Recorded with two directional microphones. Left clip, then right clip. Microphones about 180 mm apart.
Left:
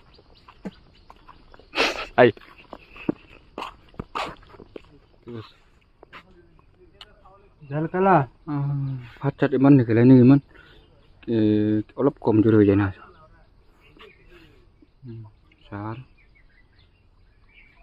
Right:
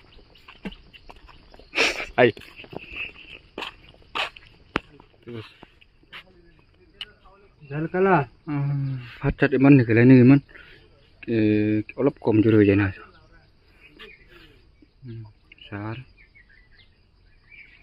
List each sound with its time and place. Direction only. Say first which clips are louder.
0.5 s bird: right 4 dB; 5° right (ahead or behind)
1.8 s a sound: left 1 dB; 10° left (ahead or behind)
2.5 s dog: right 7 dB; 5° right (ahead or behind)
4.8 s a sound: right 1 dB; centre (ahead or behind)
7.8 s speech: left 1 dB; 60° left (ahead or behind)
8.5 s a man's voice: even; 5° right (ahead or behind)
15.6 s speech: even; centre (ahead or behind)